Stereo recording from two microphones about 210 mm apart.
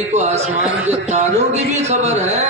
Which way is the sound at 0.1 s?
35° right (ahead or behind).